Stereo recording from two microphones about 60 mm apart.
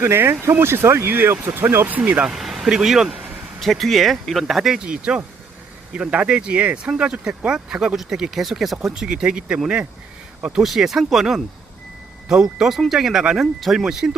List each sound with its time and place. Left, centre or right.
0.0 s speech: right
1.9 s speech: right
2.2 s speech: centre
3.6 s speech: centre